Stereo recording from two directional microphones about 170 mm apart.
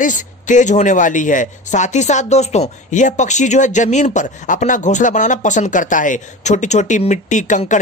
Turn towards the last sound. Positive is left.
turn(degrees=45)  # may be behind; listen again after turning